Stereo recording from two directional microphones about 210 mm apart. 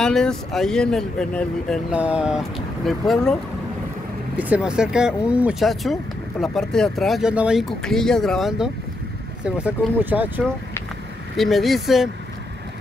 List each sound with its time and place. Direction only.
0.0 s speech: 5° left (ahead or behind)
4.4 s speech: 5° right (ahead or behind)